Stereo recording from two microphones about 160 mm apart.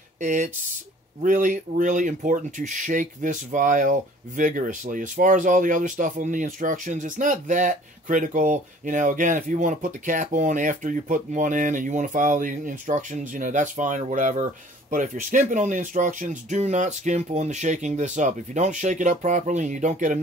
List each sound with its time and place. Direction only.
0.2 s speech: 55° right (ahead or behind)